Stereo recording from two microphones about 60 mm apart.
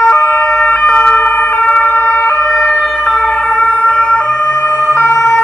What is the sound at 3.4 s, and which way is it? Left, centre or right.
Emergency vehicle, left.